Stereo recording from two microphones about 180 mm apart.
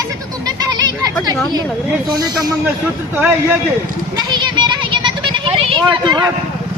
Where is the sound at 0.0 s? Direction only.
20° right (ahead or behind).